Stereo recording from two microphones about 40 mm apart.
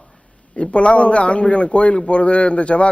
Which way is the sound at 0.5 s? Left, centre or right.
Left.